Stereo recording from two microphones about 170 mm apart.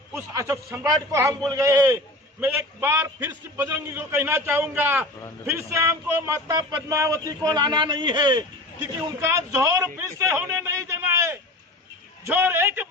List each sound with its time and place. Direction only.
0.1 s a man's voice: 15° right (ahead or behind)